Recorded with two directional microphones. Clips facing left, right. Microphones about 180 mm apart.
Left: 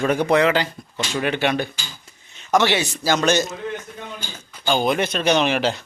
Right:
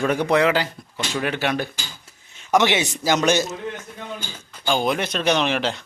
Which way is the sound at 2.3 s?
15° right (ahead or behind).